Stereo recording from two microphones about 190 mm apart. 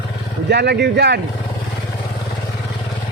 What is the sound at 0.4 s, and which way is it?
Speech, 60° right (ahead or behind).